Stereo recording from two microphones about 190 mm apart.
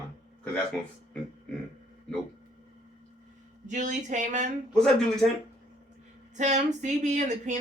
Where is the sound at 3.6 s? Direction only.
40° right (ahead or behind).